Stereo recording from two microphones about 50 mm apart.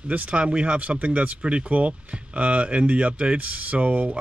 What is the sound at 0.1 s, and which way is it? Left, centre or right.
Speech, right.